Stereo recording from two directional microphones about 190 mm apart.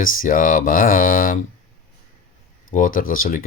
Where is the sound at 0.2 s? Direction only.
45° left (ahead or behind).